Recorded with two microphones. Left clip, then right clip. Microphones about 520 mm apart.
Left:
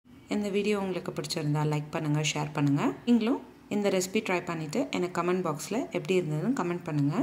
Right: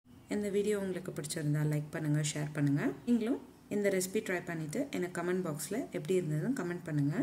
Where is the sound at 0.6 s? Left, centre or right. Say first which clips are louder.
Left 4 dB; right.